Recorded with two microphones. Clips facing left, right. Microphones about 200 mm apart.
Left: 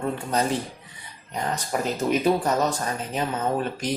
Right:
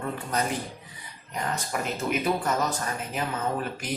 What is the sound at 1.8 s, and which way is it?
Speech, 35° left (ahead or behind).